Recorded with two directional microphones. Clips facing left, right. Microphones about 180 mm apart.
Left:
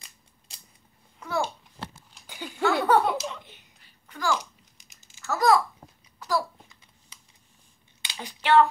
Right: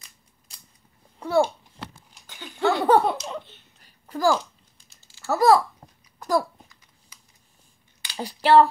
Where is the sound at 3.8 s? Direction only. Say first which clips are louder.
Right 9 dB; 40° right (ahead or behind).